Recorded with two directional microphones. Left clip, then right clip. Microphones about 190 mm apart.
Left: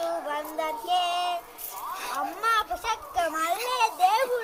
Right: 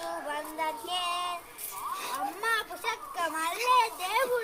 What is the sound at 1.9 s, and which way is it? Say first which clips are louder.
A child's voice: left 3 dB; 20° right (ahead or behind).